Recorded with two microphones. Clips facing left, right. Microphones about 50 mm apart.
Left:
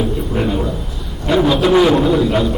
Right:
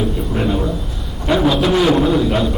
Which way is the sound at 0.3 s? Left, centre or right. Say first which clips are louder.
Even; centre.